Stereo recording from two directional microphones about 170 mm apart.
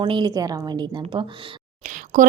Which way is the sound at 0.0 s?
30° right (ahead or behind).